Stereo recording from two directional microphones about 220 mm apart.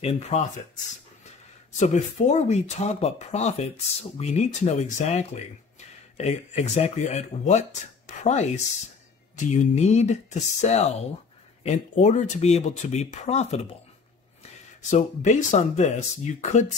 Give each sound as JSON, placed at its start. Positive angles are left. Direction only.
{"t": 0.0, "sound": "speech", "side_deg": 30}
{"t": 1.8, "sound": "speech", "side_deg": 30}
{"t": 14.8, "sound": "speech", "side_deg": 35}